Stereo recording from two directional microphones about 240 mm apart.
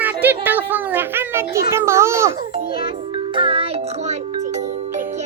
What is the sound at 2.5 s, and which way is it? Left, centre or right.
Music, right.